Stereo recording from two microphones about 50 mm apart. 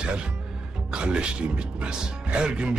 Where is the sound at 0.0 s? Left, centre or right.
Centre.